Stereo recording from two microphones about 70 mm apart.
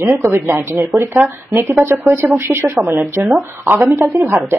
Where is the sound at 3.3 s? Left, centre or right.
Right.